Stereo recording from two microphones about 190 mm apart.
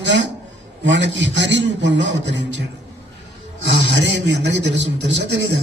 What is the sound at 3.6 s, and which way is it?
A man's voice, 70° right (ahead or behind).